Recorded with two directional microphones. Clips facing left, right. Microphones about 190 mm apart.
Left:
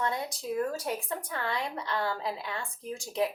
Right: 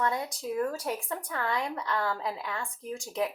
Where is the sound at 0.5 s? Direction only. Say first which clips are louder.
Even; 35° left (ahead or behind).